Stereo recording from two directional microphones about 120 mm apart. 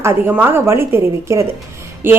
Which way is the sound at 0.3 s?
15° right (ahead or behind).